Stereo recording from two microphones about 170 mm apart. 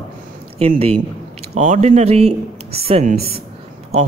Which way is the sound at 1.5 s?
45° right (ahead or behind).